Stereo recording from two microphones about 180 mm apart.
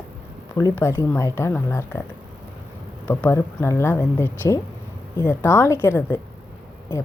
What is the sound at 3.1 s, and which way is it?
A woman's voice, 15° left (ahead or behind).